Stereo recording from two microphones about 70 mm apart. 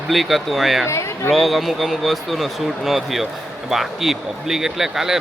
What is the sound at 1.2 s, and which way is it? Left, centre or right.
A man's voice, centre.